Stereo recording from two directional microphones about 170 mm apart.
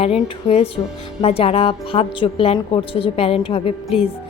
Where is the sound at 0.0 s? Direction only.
35° left (ahead or behind).